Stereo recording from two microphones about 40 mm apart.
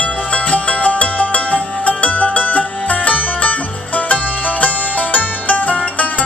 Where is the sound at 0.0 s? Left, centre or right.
Left.